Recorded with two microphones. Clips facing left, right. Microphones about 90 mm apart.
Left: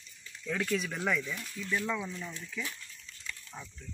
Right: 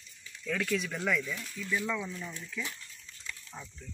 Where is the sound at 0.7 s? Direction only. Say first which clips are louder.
Even; centre (ahead or behind).